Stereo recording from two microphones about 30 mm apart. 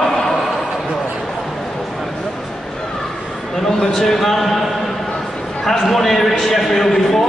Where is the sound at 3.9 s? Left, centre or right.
Centre.